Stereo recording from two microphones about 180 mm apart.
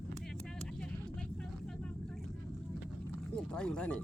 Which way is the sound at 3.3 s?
5° left (ahead or behind).